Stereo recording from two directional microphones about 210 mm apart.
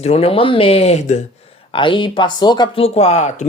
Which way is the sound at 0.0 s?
30° left (ahead or behind).